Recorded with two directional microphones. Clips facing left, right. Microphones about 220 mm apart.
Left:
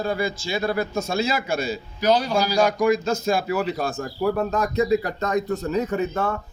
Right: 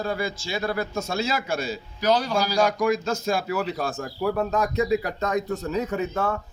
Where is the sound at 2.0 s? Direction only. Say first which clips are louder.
Left 2 dB; 15° left (ahead or behind).